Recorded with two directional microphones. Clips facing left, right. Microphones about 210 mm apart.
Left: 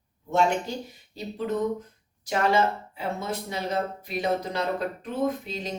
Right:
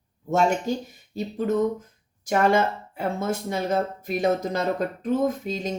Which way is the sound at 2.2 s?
50° right (ahead or behind).